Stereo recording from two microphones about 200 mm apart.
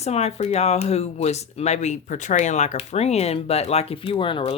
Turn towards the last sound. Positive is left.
turn(degrees=25)  # may be behind; listen again after turning